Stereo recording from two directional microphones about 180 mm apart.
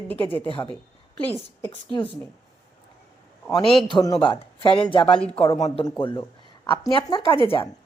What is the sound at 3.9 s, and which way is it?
Speech, 25° left (ahead or behind).